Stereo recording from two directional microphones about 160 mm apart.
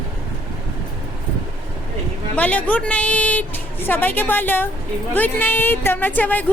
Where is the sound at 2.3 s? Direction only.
10° left (ahead or behind).